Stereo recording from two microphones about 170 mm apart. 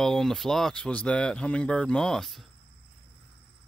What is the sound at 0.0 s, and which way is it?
Speech, 5° left (ahead or behind).